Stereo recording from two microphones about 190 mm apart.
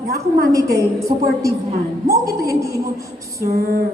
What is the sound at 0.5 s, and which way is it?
A woman's voice, 15° right (ahead or behind).